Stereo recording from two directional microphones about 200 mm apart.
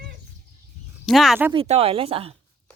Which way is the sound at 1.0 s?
Centre (ahead or behind).